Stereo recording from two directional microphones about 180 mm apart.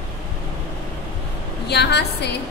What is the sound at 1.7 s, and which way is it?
Speech, 65° left (ahead or behind).